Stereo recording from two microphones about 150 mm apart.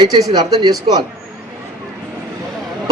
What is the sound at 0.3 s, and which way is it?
Speech, 25° right (ahead or behind).